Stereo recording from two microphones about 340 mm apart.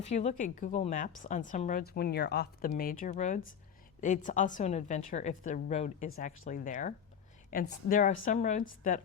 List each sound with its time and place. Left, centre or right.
0.0 s a woman's voice: centre